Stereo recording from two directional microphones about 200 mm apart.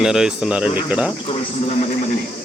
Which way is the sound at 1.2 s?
30° left (ahead or behind).